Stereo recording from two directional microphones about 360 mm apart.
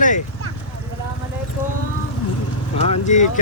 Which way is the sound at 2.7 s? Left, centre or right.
Centre.